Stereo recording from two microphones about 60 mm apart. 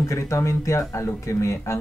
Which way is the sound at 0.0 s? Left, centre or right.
Left.